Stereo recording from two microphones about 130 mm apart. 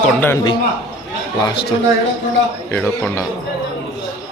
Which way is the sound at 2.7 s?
10° left (ahead or behind).